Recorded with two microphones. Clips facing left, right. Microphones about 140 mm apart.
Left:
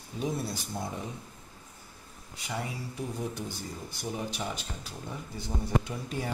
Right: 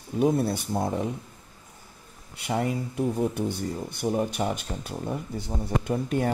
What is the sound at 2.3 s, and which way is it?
Speech, 60° right (ahead or behind).